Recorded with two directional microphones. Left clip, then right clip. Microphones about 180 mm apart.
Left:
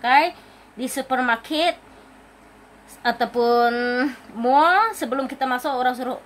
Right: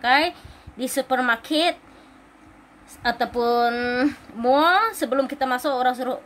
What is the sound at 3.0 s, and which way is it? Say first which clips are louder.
Speech: left 2 dB; 10° right (ahead or behind).